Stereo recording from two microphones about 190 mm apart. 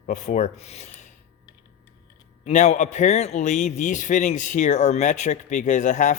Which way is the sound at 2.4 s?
40° left (ahead or behind).